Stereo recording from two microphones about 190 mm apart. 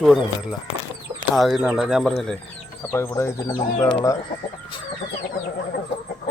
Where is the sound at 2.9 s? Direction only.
15° left (ahead or behind).